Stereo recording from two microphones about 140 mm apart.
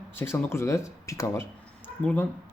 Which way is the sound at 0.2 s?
15° left (ahead or behind).